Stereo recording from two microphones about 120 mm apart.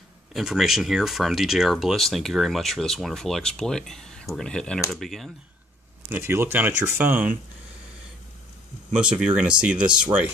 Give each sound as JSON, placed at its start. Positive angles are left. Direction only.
{"t": 0.3, "sound": "speech", "side_deg": 0}
{"t": 6.0, "sound": "speech", "side_deg": -20}
{"t": 8.9, "sound": "speech", "side_deg": -10}